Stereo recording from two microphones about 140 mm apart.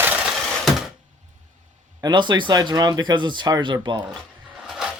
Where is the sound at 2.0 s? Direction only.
30° right (ahead or behind).